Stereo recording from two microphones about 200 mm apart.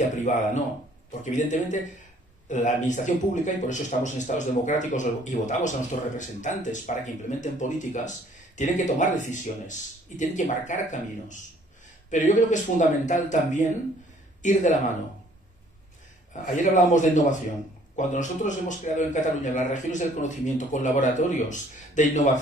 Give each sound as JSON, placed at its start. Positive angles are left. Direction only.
{"t": 0.1, "sound": "a man's voice", "side_deg": 40}
{"t": 16.5, "sound": "a man's voice", "side_deg": 40}